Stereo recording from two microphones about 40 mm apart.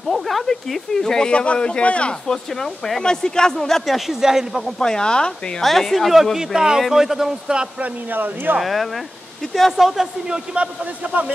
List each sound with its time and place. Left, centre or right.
0.1 s speech: centre
1.3 s a man's voice: left
2.2 s speech: centre
3.6 s speech: centre
4.1 s speech: centre
4.7 s a man's voice: centre
5.6 s speech: centre
6.3 s speech: centre
7.8 s speech: right
8.5 s speech: centre
10.3 s a man's voice: right